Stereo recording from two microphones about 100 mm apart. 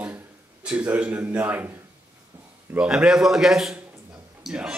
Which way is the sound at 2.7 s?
10° right (ahead or behind).